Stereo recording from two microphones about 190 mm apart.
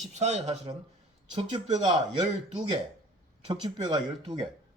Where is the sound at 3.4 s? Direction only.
20° right (ahead or behind).